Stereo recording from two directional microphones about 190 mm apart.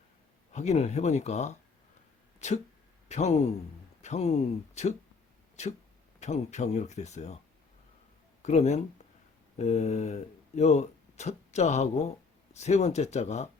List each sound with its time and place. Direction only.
0.5 s speech: 35° left (ahead or behind)
8.4 s speech: 35° left (ahead or behind)